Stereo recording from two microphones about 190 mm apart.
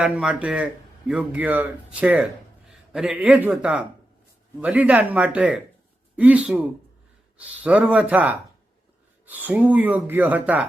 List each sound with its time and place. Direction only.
0.0 s a man's voice: 5° right (ahead or behind)